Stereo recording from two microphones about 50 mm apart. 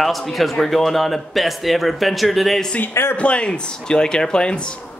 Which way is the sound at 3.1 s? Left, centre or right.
Left.